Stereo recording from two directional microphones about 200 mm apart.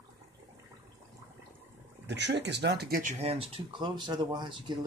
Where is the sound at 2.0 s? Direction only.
60° right (ahead or behind).